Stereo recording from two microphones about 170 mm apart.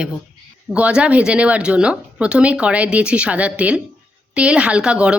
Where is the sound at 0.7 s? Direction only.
5° right (ahead or behind).